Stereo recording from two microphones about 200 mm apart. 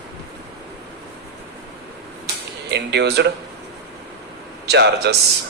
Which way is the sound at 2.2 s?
60° right (ahead or behind).